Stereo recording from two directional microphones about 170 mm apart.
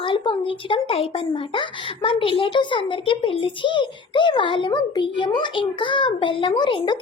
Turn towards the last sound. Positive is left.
turn(degrees=25)  # may be behind; listen again after turning